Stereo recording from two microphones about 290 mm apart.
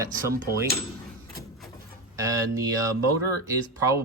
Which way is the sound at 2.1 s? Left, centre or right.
Centre.